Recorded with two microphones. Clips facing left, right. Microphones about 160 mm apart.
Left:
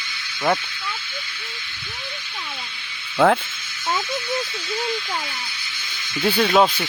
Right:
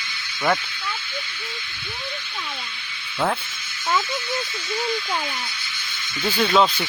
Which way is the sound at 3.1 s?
75° left (ahead or behind).